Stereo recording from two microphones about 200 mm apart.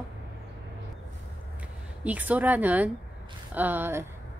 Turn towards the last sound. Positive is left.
turn(degrees=-10)  # may be behind; listen again after turning